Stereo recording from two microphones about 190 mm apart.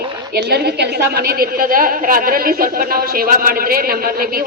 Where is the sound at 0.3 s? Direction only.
60° right (ahead or behind).